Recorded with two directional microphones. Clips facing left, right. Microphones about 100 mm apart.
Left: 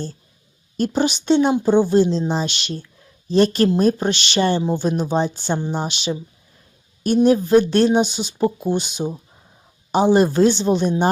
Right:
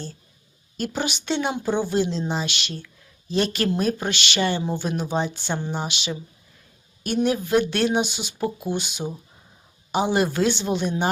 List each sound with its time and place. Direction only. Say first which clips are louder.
0.8 s speech: left 7 dB; 35° left (ahead or behind)
1.6 s speech: left 8 dB; 20° left (ahead or behind)
1.9 s speech: left 7 dB; 30° left (ahead or behind)
4.6 s speech: left 6 dB; 20° left (ahead or behind)
5.0 s speech: left 5 dB; 35° left (ahead or behind)
7.2 s speech: left 7 dB; 35° left (ahead or behind)